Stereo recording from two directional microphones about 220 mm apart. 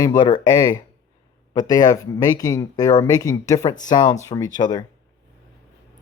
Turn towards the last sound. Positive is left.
turn(degrees=20)  # may be behind; listen again after turning